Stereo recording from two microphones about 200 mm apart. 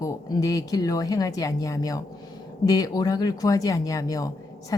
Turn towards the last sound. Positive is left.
turn(degrees=15)  # may be behind; listen again after turning